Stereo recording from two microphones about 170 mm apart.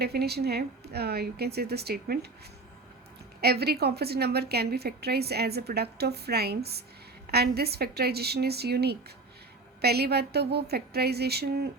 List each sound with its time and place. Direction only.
0.0 s a woman's voice: 70° right (ahead or behind)
3.4 s a woman's voice: 70° right (ahead or behind)